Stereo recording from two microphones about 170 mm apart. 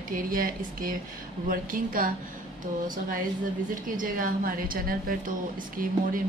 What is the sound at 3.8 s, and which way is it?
Speech, 55° right (ahead or behind).